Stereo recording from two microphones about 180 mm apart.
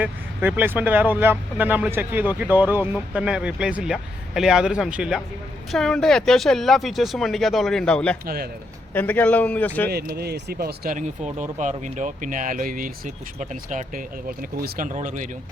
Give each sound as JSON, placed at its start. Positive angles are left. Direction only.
{"t": 0.0, "sound": "a man's voice", "side_deg": -10}
{"t": 9.9, "sound": "speech", "side_deg": -60}